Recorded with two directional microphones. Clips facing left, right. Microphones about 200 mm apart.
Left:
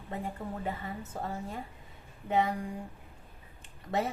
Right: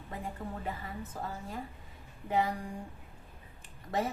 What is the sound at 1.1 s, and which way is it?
Speech, 25° left (ahead or behind).